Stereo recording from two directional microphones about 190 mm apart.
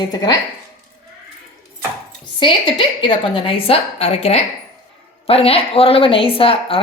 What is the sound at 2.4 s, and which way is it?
A woman's voice, 25° left (ahead or behind).